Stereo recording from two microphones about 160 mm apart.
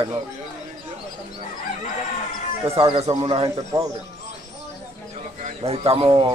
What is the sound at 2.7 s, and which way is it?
Speech, 35° right (ahead or behind).